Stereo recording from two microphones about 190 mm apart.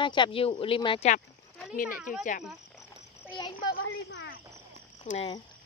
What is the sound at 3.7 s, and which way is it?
Speech, 80° left.